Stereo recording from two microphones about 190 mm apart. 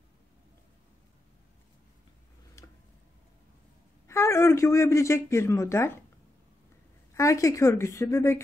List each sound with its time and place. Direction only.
4.1 s speech: 15° left (ahead or behind)
7.2 s speech: 15° left (ahead or behind)